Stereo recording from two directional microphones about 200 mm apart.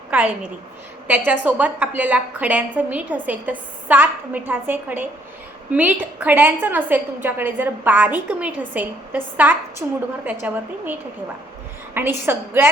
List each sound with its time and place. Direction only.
0.1 s a woman's voice: 10° right (ahead or behind)
11.9 s a woman's voice: 10° right (ahead or behind)